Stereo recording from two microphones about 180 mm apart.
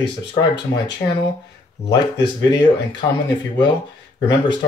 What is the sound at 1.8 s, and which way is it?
Speech, 20° left (ahead or behind).